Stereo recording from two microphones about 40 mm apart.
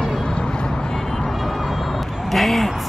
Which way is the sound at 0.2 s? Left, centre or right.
Left.